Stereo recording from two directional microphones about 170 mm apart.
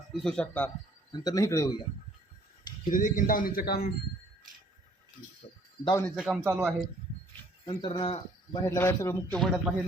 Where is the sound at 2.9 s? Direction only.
50° left (ahead or behind).